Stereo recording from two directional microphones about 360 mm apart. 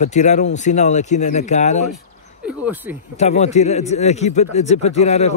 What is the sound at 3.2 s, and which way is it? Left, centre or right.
A man's voice, centre.